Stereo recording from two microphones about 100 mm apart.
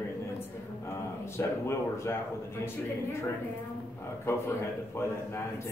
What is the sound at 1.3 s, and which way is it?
Speech, 25° left (ahead or behind).